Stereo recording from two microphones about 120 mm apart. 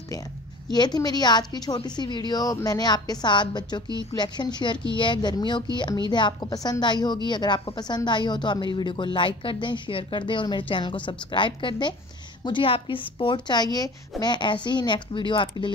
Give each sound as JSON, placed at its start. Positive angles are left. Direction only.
{"t": 0.7, "sound": "a woman's voice", "side_deg": 35}